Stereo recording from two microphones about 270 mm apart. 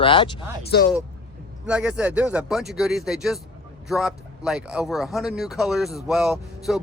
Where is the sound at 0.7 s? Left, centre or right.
Left.